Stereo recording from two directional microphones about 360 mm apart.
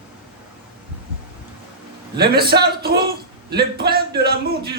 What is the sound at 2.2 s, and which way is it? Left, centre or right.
Speech, right.